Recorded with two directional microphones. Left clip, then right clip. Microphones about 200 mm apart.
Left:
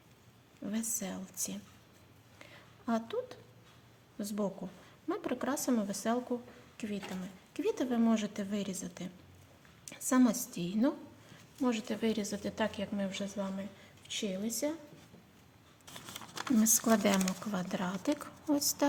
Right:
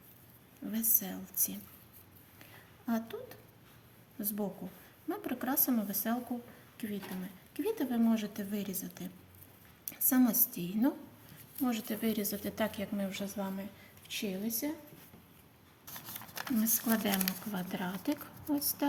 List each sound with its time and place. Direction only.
0.7 s a woman's voice: 35° left (ahead or behind)
2.8 s a woman's voice: 40° left (ahead or behind)
14.1 s speech: 45° left (ahead or behind)
16.1 s a sound: 5° right (ahead or behind)
16.6 s speech: 55° left (ahead or behind)